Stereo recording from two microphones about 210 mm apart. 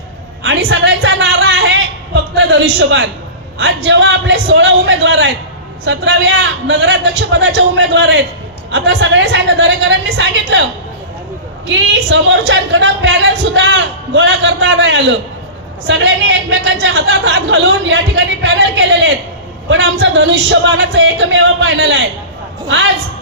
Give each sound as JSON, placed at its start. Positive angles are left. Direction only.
{"t": 0.4, "sound": "a woman's voice", "side_deg": -60}